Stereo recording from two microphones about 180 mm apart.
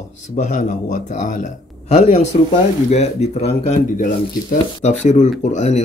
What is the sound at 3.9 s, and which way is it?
Speech, 45° left (ahead or behind).